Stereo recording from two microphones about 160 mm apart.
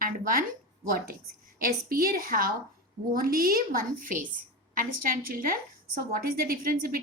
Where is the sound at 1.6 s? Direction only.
65° right (ahead or behind).